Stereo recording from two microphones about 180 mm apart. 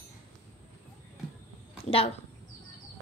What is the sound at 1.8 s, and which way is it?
Speech, 35° left (ahead or behind).